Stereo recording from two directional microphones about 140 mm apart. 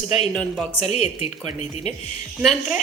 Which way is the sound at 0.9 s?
50° left (ahead or behind).